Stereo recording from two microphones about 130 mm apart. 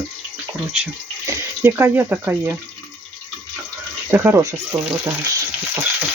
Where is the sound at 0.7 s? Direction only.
10° right (ahead or behind).